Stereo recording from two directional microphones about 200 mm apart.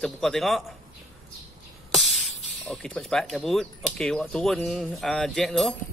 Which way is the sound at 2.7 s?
Centre (ahead or behind).